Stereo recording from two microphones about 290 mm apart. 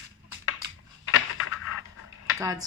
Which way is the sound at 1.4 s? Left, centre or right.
Left.